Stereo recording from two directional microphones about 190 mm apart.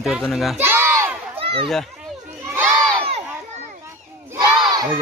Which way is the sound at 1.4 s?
30° right (ahead or behind).